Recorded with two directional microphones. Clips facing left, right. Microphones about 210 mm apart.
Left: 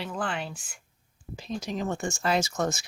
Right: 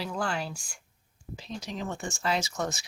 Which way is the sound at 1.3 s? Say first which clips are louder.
Left 5 dB; 50° left (ahead or behind).